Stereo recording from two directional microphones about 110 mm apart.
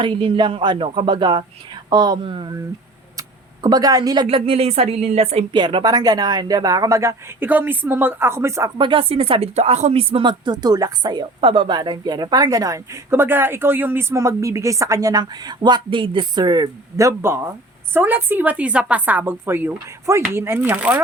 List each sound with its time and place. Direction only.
0.0 s speech: 50° right (ahead or behind)
3.2 s a sound: 35° right (ahead or behind)
4.3 s speech: 55° right (ahead or behind); by 5.5 s 75° right (ahead or behind)
5.5 s speech: 45° right (ahead or behind); by 7.4 s 30° right (ahead or behind)
7.4 s speech: 15° right (ahead or behind)
8.8 s speech: 50° right (ahead or behind)
11.3 s speech: 55° right (ahead or behind)
11.8 s a woman's voice: 40° right (ahead or behind); by 21.0 s 15° right (ahead or behind)